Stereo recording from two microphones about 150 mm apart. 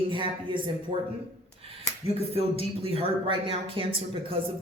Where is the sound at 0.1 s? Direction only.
35° right (ahead or behind).